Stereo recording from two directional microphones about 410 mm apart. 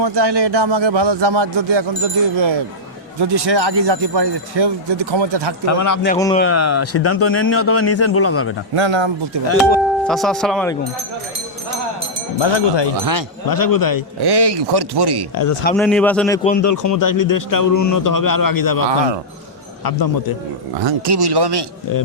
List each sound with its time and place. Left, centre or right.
0.0 s speech: right
3.2 s speech: right
5.6 s speech: left
6.3 s speech: left
8.8 s a man's voice: right
9.6 s speech: centre
12.4 s speech: left
13.5 s speech: left
14.2 s speech: right
15.7 s speech: centre
16.6 s speech: left
18.9 s a man's voice: right
19.8 s a man's voice: left
20.8 s speech: right